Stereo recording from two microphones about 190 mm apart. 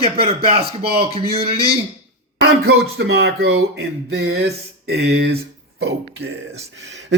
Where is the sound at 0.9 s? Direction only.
30° right (ahead or behind).